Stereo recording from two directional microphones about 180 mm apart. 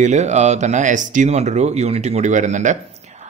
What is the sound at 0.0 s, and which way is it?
A man's voice, 40° right (ahead or behind).